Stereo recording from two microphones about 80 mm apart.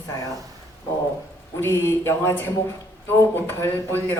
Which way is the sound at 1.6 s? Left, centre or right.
Left.